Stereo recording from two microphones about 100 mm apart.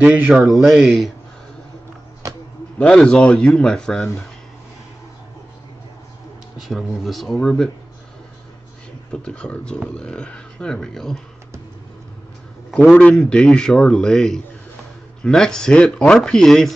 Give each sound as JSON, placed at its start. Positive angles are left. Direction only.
{"t": 0.0, "sound": "speech", "side_deg": -15}
{"t": 0.3, "sound": "speech", "side_deg": -5}
{"t": 2.2, "sound": "a sound", "side_deg": -30}
{"t": 2.8, "sound": "speech", "side_deg": 10}
{"t": 6.6, "sound": "speech", "side_deg": 0}
{"t": 9.1, "sound": "speech", "side_deg": 10}
{"t": 12.9, "sound": "speech", "side_deg": 10}